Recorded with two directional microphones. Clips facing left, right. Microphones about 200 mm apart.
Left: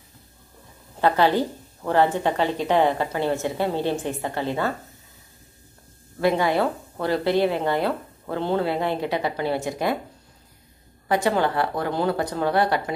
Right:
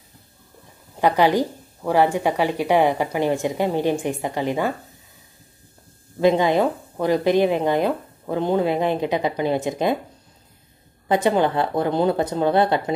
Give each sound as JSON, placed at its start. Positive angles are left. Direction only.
{"t": 1.0, "sound": "speech", "side_deg": -15}
{"t": 6.1, "sound": "speech", "side_deg": -20}
{"t": 11.1, "sound": "speech", "side_deg": -20}